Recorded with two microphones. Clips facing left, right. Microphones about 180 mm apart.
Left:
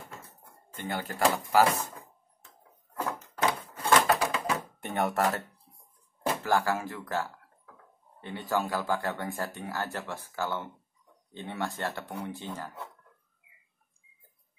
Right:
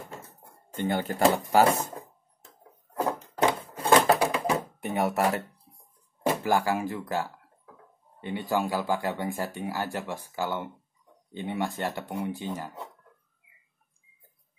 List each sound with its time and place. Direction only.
0.7 s speech: 25° right (ahead or behind)
3.4 s a sound: 25° right (ahead or behind)
4.7 s speech: 5° right (ahead or behind)
6.2 s door: 15° right (ahead or behind)
8.2 s speech: 15° right (ahead or behind)